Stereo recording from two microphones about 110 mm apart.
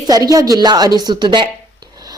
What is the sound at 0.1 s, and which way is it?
A woman's voice, 35° right (ahead or behind).